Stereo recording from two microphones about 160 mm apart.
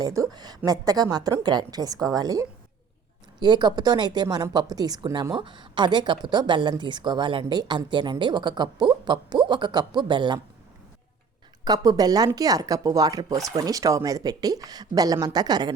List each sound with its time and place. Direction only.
0.0 s speech: 20° right (ahead or behind)
11.6 s speech: 25° right (ahead or behind)